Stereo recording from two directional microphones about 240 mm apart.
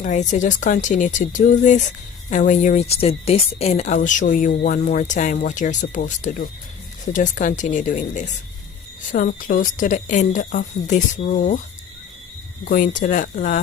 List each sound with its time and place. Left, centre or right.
0.0 s speech: left
12.6 s speech: left